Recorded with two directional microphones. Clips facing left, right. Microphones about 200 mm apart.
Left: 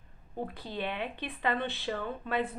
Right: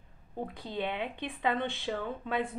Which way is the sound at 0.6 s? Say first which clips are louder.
Right 3 dB; 20° right (ahead or behind).